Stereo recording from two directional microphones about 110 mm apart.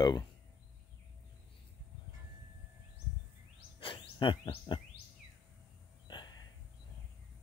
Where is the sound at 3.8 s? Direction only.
50° left (ahead or behind).